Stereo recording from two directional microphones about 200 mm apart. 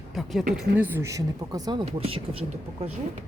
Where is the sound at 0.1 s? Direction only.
Centre (ahead or behind).